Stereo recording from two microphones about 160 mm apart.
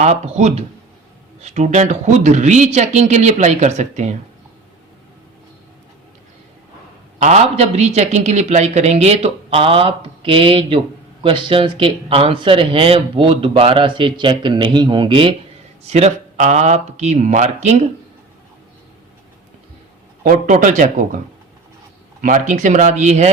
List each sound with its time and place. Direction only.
0.0 s speech: 45° right (ahead or behind)
7.2 s speech: 45° right (ahead or behind)
15.9 s speech: 45° right (ahead or behind)
20.2 s speech: 55° right (ahead or behind)
22.2 s speech: 50° right (ahead or behind)